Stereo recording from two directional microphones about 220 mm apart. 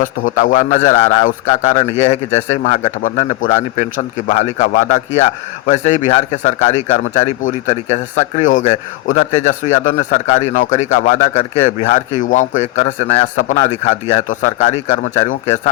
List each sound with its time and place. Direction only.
0.0 s a man's voice: 40° left (ahead or behind)
1.8 s a man's voice: 25° left (ahead or behind)